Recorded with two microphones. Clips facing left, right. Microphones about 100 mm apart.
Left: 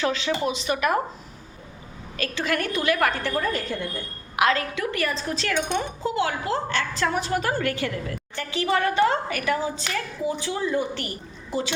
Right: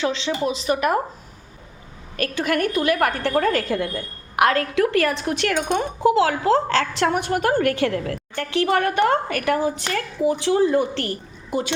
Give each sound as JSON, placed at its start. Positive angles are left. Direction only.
{"t": 0.0, "sound": "speech", "side_deg": -25}
{"t": 2.1, "sound": "a woman's voice", "side_deg": -50}
{"t": 4.4, "sound": "a woman's voice", "side_deg": -55}
{"t": 4.7, "sound": "a woman's voice", "side_deg": -80}
{"t": 5.5, "sound": "a woman's voice", "side_deg": -50}
{"t": 6.0, "sound": "a woman's voice", "side_deg": -85}
{"t": 11.5, "sound": "a woman's voice", "side_deg": -55}